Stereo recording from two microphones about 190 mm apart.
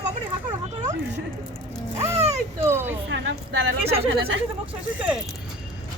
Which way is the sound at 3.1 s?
70° right (ahead or behind).